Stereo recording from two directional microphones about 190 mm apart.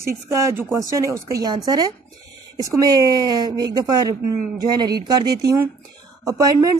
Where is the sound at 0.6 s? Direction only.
15° right (ahead or behind).